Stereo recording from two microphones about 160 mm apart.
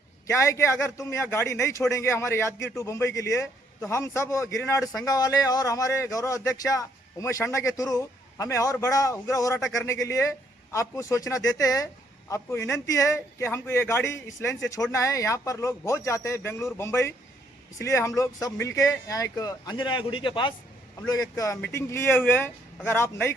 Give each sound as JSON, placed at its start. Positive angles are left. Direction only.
{"t": 0.3, "sound": "a man's voice", "side_deg": 20}